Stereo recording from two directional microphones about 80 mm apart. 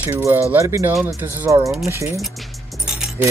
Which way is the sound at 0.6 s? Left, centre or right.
Right.